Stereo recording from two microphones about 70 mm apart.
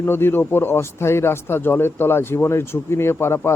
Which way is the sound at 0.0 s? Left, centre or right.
Left.